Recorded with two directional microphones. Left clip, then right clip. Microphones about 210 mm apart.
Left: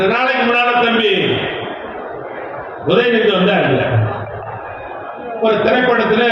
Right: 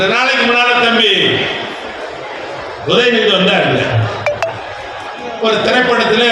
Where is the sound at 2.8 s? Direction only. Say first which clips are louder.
Right 2 dB; 25° left (ahead or behind).